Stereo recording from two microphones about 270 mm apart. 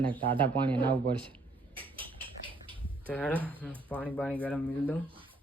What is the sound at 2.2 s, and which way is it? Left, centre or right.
Rodents, centre.